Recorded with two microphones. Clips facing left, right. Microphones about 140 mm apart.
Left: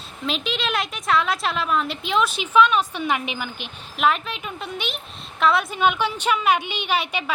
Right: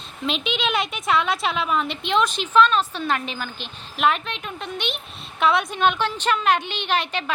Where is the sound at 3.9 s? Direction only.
Centre (ahead or behind).